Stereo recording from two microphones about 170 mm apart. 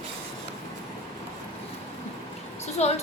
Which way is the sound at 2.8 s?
40° left (ahead or behind).